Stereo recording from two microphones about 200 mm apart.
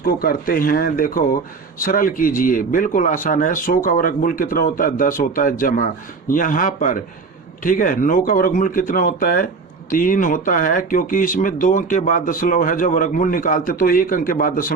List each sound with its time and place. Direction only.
0.0 s speech: 50° left (ahead or behind)